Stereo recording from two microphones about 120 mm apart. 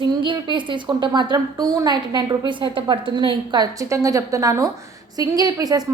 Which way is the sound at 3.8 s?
25° right (ahead or behind).